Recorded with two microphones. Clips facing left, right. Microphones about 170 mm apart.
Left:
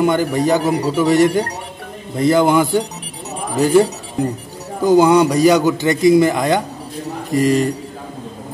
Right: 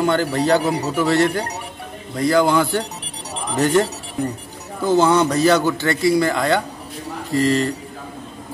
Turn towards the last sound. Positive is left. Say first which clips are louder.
# left 3 dB
turn(degrees=15)  # may be behind; listen again after turning